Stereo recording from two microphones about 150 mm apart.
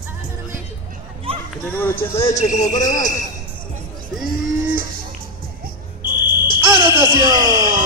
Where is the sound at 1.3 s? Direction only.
40° right (ahead or behind).